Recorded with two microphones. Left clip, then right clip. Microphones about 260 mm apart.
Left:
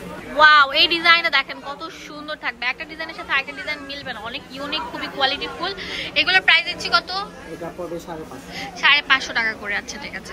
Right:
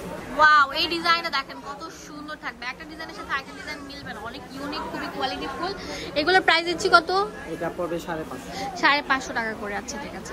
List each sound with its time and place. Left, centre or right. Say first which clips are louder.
0.4 s a woman's voice: left 5 dB; centre; by 7.2 s right
8.5 s a woman's voice: left 4 dB; right